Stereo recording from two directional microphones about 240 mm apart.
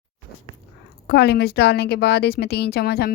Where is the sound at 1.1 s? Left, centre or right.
Left.